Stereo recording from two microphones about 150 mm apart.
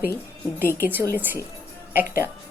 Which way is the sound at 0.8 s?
15° right (ahead or behind).